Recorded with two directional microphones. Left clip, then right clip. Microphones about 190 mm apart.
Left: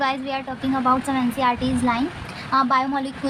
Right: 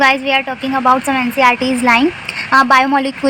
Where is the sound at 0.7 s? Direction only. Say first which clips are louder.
Right 8 dB; 45° right (ahead or behind).